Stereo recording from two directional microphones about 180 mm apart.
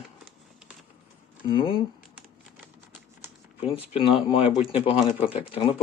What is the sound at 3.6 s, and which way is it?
Speech, 35° left (ahead or behind).